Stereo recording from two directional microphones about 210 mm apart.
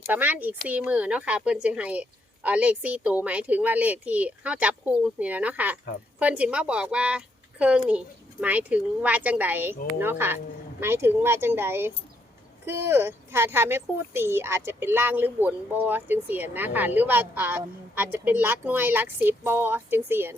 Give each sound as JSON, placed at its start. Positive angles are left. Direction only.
{"t": 0.1, "sound": "a woman's voice", "side_deg": -10}